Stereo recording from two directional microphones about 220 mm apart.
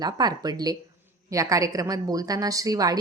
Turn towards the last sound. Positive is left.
turn(degrees=-15)  # may be behind; listen again after turning